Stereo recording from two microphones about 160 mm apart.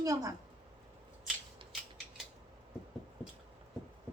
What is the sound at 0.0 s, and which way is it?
Speech, 20° right (ahead or behind).